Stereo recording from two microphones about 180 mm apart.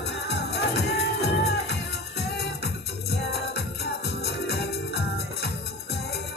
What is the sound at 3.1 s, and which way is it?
Music, 60° left (ahead or behind).